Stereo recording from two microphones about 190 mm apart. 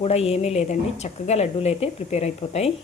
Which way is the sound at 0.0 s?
30° left (ahead or behind).